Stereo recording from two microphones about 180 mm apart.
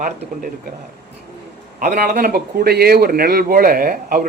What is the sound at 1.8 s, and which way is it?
A man's voice, 50° right (ahead or behind).